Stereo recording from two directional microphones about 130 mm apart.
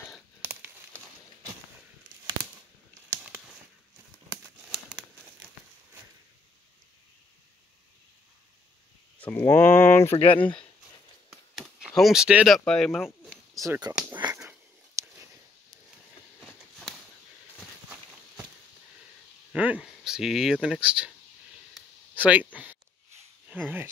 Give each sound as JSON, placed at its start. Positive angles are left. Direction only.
{"t": 0.4, "sound": "crumpling", "side_deg": -15}
{"t": 9.2, "sound": "speech", "side_deg": 15}
{"t": 10.1, "sound": "speech", "side_deg": 45}
{"t": 11.5, "sound": "a sound", "side_deg": -5}
{"t": 12.0, "sound": "speech", "side_deg": -5}
{"t": 13.6, "sound": "speech", "side_deg": -30}
{"t": 15.0, "sound": "a sound", "side_deg": -20}
{"t": 16.3, "sound": "a sound", "side_deg": 5}
{"t": 19.5, "sound": "speech", "side_deg": -10}
{"t": 22.1, "sound": "speech", "side_deg": -10}